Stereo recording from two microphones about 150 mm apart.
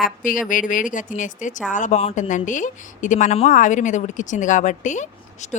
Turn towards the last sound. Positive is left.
turn(degrees=55)  # may be behind; listen again after turning